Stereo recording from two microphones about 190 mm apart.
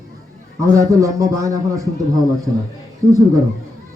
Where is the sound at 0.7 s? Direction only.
15° right (ahead or behind).